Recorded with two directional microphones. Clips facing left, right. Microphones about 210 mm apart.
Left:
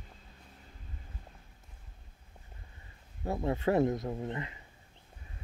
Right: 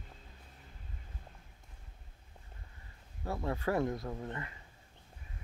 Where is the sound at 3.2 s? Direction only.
20° left (ahead or behind).